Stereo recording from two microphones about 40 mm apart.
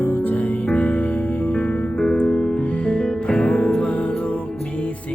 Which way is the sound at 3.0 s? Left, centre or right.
Left.